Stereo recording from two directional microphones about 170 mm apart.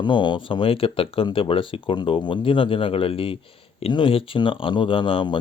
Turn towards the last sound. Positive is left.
turn(degrees=30)  # may be behind; listen again after turning